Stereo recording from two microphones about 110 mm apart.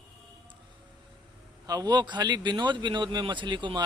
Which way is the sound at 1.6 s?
35° right (ahead or behind).